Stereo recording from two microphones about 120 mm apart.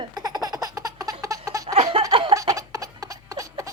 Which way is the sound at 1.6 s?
60° right (ahead or behind).